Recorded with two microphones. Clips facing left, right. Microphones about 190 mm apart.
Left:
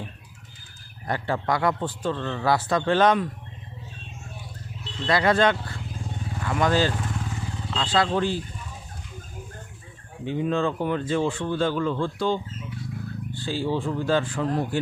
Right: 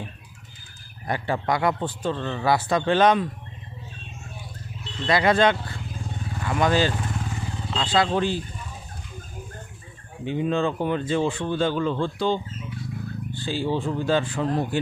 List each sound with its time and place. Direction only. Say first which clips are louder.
1.0 s speech: right 1 dB; 15° right (ahead or behind)
5.0 s speech: right 1 dB; 15° right (ahead or behind)
10.2 s speech: right 1 dB; 20° right (ahead or behind)